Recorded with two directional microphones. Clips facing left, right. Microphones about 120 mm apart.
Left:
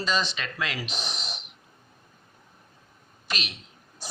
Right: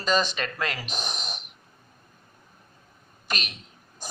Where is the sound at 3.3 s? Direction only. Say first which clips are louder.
Right 1 dB; 45° right (ahead or behind).